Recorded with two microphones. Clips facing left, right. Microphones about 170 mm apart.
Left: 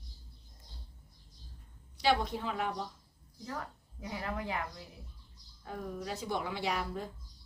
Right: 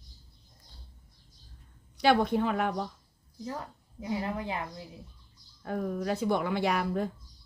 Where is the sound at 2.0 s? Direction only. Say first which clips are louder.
Right 6 dB; 55° right (ahead or behind).